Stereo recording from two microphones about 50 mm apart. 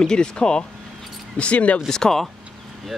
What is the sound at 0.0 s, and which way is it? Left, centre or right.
Speech, centre.